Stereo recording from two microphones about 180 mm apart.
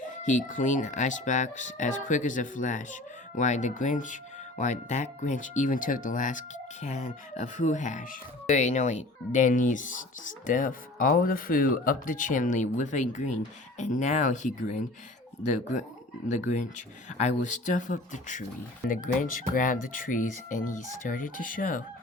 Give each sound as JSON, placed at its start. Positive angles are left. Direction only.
{"t": 0.0, "sound": "speech", "side_deg": 45}
{"t": 16.5, "sound": "speech", "side_deg": 40}